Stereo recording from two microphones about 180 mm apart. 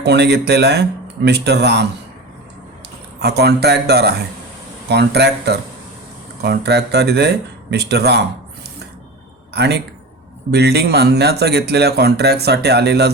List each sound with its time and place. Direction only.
0.0 s speech: 65° right (ahead or behind)
3.2 s speech: 65° right (ahead or behind)
9.5 s speech: 65° right (ahead or behind)